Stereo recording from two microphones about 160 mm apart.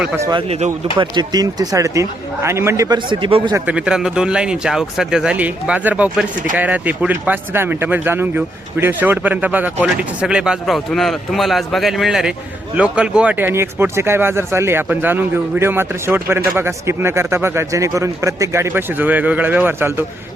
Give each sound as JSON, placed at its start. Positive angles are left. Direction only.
{"t": 0.2, "sound": "speech", "side_deg": -25}
{"t": 0.4, "sound": "speech", "side_deg": -40}
{"t": 0.9, "sound": "speech", "side_deg": -25}
{"t": 3.5, "sound": "speech", "side_deg": -10}